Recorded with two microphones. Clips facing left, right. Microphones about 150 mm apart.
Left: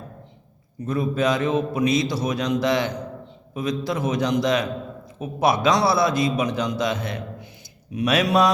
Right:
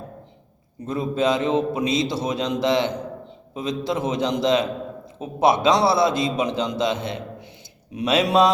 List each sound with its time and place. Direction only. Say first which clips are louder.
0.9 s a man's voice: even; 25° right (ahead or behind)